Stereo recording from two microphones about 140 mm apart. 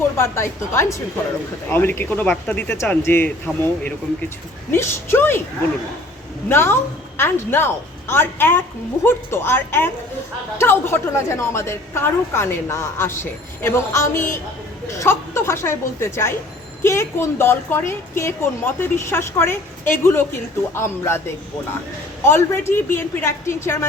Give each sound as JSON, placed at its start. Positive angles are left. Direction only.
{"t": 0.2, "sound": "a woman's voice", "side_deg": 20}
{"t": 6.5, "sound": "a woman's voice", "side_deg": 15}
{"t": 22.2, "sound": "a woman's voice", "side_deg": 15}